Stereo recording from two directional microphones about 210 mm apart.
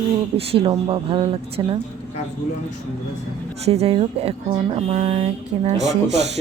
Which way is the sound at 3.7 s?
30° right (ahead or behind).